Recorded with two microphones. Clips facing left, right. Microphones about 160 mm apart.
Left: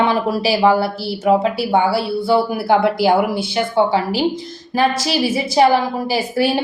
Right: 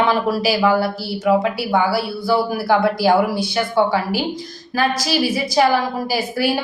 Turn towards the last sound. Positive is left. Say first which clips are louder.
# left 2 dB
turn(degrees=25)  # may be behind; listen again after turning